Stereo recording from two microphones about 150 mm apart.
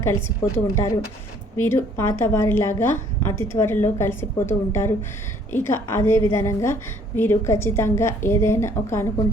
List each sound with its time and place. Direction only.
0.0 s a woman's voice: 15° left (ahead or behind)